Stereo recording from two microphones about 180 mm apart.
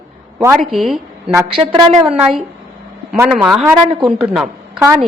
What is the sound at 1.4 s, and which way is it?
Speech, 30° right (ahead or behind).